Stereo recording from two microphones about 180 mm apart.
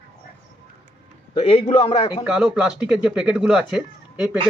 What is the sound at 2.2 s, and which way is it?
Speech, 5° right (ahead or behind).